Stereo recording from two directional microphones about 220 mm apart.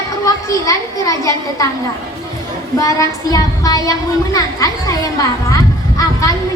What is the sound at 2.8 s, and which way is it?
Speech, 15° left (ahead or behind).